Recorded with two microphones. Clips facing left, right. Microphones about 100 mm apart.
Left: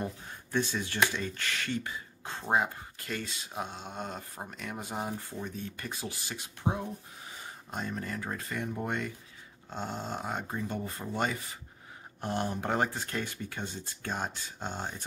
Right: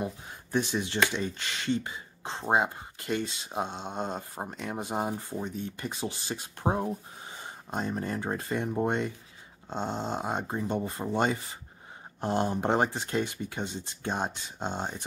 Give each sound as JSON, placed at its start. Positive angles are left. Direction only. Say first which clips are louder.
{"t": 0.0, "sound": "a sound", "louder": "right 2 dB", "side_deg": -15}
{"t": 1.1, "sound": "speech", "louder": "right 2 dB", "side_deg": -20}
{"t": 7.2, "sound": "speech", "louder": "right 3 dB", "side_deg": -25}